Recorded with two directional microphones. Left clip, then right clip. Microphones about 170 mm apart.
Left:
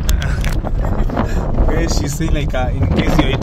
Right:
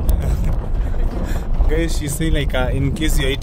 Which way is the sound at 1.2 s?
10° right (ahead or behind).